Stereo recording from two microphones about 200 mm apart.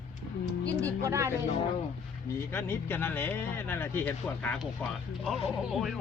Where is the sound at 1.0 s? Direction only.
15° right (ahead or behind).